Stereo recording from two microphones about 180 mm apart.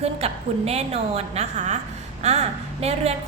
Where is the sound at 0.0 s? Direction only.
35° right (ahead or behind).